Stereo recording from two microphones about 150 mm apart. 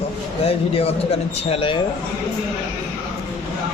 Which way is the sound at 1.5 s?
35° left (ahead or behind).